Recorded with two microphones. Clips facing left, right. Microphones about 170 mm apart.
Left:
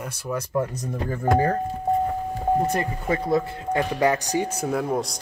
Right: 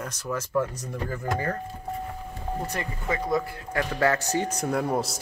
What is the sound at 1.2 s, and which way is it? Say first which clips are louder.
Speech: left 10 dB; 45° left (ahead or behind).